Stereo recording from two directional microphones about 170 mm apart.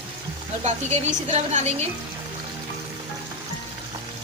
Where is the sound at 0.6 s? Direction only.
40° right (ahead or behind).